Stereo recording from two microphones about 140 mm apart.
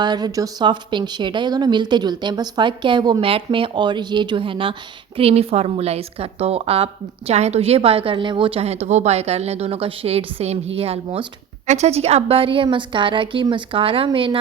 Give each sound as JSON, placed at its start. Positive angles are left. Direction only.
{"t": 0.0, "sound": "a woman's voice", "side_deg": -30}